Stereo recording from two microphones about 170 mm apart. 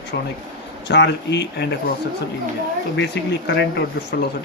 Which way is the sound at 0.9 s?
90° left.